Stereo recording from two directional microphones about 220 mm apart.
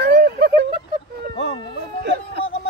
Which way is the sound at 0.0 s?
45° right (ahead or behind).